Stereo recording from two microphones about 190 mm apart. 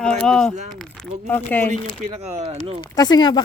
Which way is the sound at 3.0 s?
20° left (ahead or behind).